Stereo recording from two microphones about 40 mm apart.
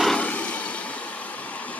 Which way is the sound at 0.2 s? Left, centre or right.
Left.